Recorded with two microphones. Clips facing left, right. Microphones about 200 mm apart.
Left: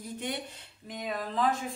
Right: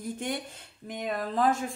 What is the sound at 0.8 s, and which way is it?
Speech, 50° right (ahead or behind).